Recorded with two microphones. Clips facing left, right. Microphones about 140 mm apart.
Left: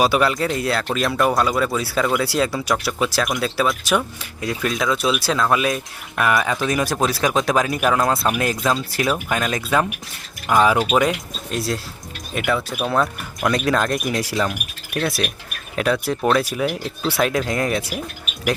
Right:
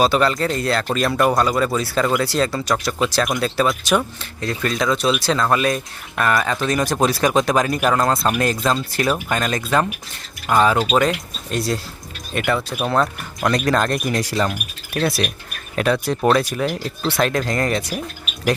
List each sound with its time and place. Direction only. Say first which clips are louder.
0.0 s speech: right 1 dB; 10° left (ahead or behind)